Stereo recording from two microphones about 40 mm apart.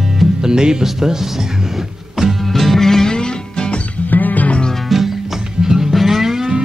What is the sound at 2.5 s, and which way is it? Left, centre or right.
Music, centre.